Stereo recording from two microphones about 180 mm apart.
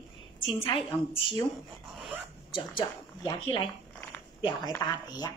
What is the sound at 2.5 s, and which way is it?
A woman's voice, 25° left (ahead or behind).